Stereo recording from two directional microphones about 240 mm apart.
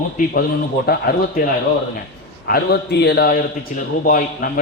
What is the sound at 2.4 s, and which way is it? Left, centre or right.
A man's voice, left.